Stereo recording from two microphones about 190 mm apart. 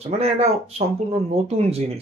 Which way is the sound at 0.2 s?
35° right (ahead or behind).